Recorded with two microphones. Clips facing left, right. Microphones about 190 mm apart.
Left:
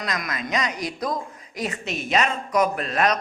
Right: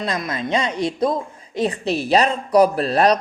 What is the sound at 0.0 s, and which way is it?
Speech, 30° right (ahead or behind).